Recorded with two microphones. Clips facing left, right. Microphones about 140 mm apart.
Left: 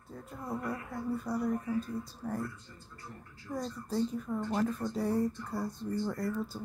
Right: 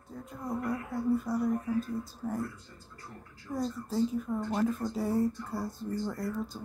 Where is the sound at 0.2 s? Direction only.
Centre (ahead or behind).